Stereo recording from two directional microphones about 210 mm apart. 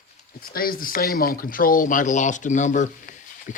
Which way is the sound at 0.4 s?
45° left (ahead or behind).